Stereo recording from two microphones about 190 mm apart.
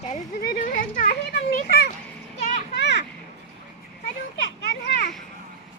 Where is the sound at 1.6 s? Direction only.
60° left (ahead or behind).